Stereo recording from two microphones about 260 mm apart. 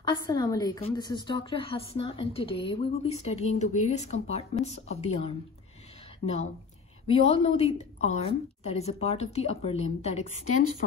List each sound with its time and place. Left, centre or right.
0.0 s a woman's voice: centre
7.1 s a woman's voice: left